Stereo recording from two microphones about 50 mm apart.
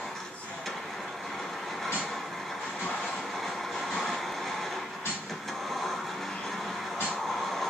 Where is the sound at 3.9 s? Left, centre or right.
Centre.